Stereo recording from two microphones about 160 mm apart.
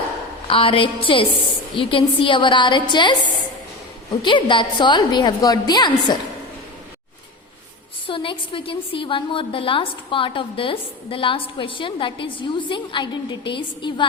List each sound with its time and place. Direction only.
0.4 s a woman's voice: 35° left (ahead or behind)
4.2 s a woman's voice: 30° left (ahead or behind)
8.0 s a woman's voice: 30° left (ahead or behind)